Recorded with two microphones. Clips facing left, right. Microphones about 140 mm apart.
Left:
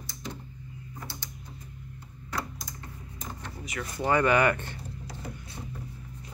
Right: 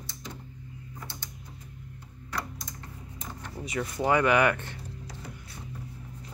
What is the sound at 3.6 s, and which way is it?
Speech, 20° right (ahead or behind).